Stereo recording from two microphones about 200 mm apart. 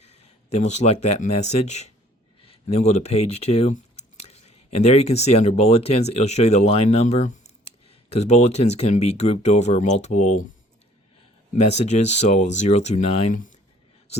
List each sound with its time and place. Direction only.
0.0 s speech: 35° left (ahead or behind)
11.5 s speech: 35° left (ahead or behind)